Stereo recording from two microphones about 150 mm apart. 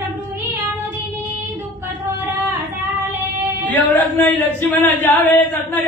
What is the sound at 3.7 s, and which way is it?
Chant, 10° left (ahead or behind).